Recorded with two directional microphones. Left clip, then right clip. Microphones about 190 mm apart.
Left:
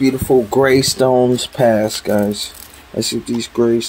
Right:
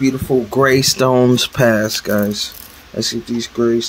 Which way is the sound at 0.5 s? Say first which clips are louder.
Even; centre (ahead or behind).